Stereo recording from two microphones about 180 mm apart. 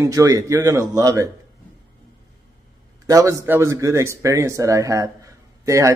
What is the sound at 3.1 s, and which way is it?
Speech, 20° right (ahead or behind).